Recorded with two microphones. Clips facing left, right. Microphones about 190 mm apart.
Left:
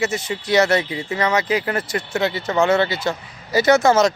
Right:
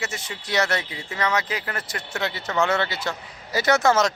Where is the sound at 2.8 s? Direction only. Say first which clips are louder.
Left 6 dB; centre (ahead or behind).